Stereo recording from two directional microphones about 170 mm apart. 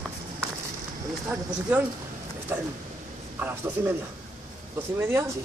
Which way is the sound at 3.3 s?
10° right (ahead or behind).